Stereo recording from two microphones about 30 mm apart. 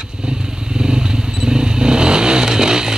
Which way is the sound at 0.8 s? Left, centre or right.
Right.